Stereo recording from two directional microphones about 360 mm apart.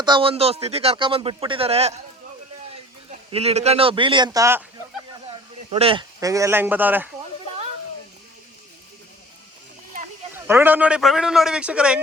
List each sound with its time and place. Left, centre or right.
0.0 s speech: centre
3.1 s speech: centre
10.3 s a man's voice: centre